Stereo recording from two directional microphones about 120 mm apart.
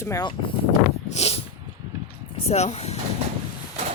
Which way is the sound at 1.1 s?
60° left (ahead or behind).